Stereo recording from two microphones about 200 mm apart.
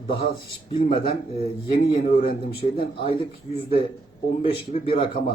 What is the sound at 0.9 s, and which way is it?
Speech, 25° left (ahead or behind).